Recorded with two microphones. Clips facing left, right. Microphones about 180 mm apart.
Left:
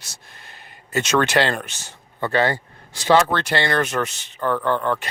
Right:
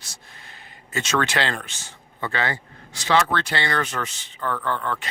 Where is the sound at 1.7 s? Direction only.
70° left (ahead or behind).